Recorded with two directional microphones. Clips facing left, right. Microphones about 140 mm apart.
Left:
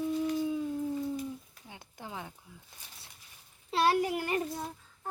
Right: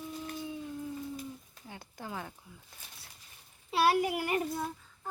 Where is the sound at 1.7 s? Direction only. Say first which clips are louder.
Right 2 dB; 20° left (ahead or behind).